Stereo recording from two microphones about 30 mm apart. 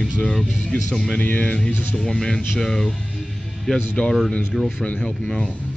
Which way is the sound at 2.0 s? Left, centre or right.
Centre.